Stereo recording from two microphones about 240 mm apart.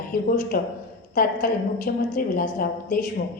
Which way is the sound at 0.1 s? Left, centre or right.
Left.